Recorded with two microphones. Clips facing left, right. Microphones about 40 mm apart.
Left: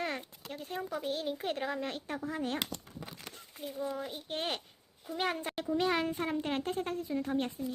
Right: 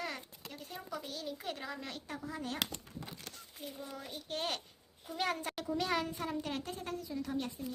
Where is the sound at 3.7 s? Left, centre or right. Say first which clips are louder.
Left 9 dB; centre; by 7.5 s left.